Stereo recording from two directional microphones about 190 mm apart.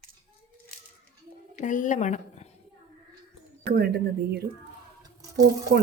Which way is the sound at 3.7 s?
60° right (ahead or behind).